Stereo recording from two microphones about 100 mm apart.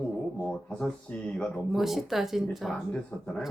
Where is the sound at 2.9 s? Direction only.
10° left (ahead or behind).